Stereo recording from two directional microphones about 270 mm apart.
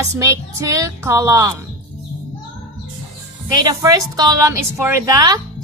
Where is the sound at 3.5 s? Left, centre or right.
Centre.